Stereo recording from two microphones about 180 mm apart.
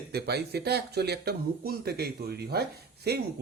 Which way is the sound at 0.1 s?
65° right (ahead or behind).